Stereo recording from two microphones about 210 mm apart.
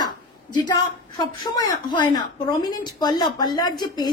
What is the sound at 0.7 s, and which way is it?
A woman's voice, 20° left (ahead or behind).